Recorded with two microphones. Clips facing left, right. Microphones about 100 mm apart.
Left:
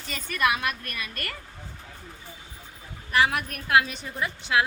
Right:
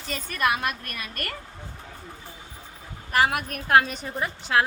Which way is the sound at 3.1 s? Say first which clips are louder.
Right 1 dB; 40° right (ahead or behind).